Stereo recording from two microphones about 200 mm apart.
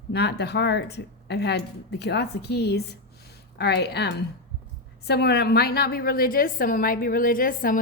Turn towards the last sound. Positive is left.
turn(degrees=45)  # may be behind; listen again after turning